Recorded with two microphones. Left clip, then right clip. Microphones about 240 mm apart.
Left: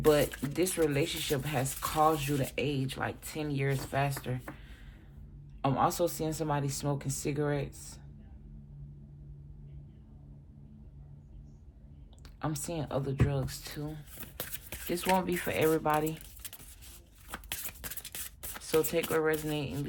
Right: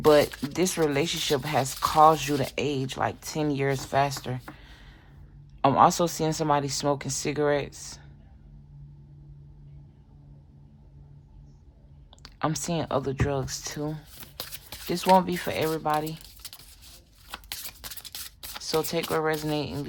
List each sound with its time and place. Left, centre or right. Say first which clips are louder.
0.0 s speech: right 7 dB; right
12.2 s speech: right 8 dB; right
14.2 s speech: right 4 dB; centre
17.2 s shuffling cards: right 3 dB; centre